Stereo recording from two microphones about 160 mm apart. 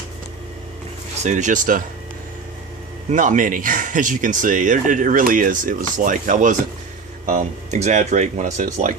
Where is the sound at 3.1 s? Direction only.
55° right (ahead or behind).